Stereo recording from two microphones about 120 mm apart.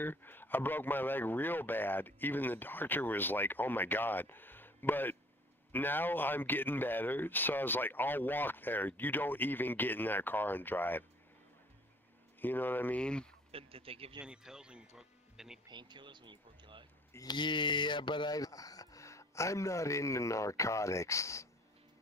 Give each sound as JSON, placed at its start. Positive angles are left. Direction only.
{"t": 0.0, "sound": "speech", "side_deg": 15}
{"t": 12.4, "sound": "speech", "side_deg": 15}
{"t": 13.5, "sound": "speech", "side_deg": -50}
{"t": 14.2, "sound": "speech", "side_deg": -5}
{"t": 15.7, "sound": "speech", "side_deg": -40}
{"t": 17.1, "sound": "speech", "side_deg": 35}